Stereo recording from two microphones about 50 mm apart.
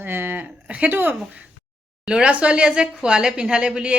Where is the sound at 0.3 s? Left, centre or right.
Right.